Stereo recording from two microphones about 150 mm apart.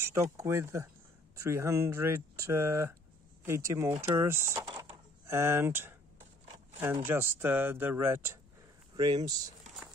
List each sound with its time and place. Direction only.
0.1 s speech: 20° right (ahead or behind)
4.6 s keys jangling: 30° right (ahead or behind); by 5.9 s 15° right (ahead or behind)
7.1 s speech: 15° right (ahead or behind)
8.9 s speech: 30° right (ahead or behind)